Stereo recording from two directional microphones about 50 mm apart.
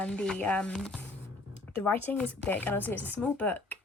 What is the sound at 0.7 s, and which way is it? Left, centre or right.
Speech, centre.